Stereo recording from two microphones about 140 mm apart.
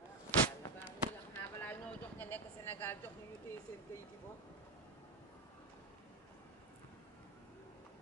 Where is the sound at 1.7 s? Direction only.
15° left (ahead or behind).